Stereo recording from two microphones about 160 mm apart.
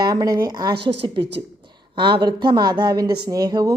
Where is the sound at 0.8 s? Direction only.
90° right.